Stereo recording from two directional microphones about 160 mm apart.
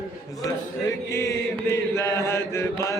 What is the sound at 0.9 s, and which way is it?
Chant, 15° left (ahead or behind).